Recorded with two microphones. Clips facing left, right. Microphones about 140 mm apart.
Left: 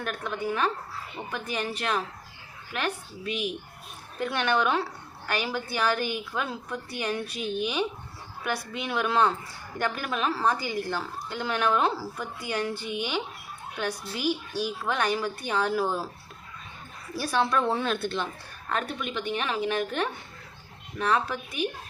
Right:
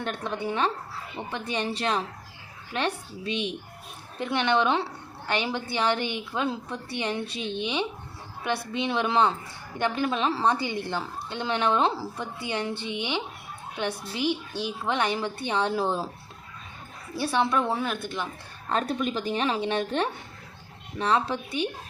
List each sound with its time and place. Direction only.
0.0 s a woman's voice: 30° right (ahead or behind)
17.2 s a woman's voice: 20° right (ahead or behind)
18.7 s a woman's voice: 35° right (ahead or behind)